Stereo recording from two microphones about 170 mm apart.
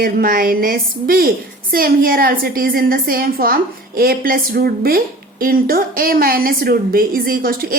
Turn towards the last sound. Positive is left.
turn(degrees=-60)  # may be behind; listen again after turning